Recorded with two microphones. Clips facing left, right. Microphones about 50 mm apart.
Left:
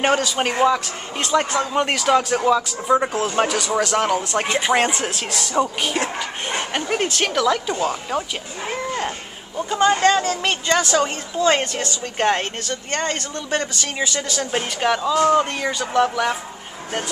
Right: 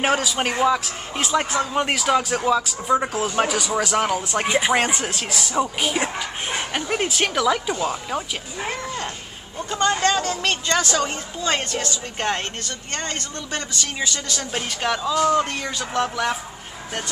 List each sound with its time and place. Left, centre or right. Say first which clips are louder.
0.0 s speech: left 2 dB; centre
11.0 s a woman's voice: left 4 dB; left; by 16.3 s centre